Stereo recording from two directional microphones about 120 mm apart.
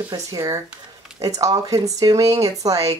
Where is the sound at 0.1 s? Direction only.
30° right (ahead or behind).